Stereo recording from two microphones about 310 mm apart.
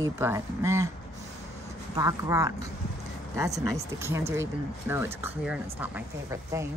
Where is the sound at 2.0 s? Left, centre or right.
Centre.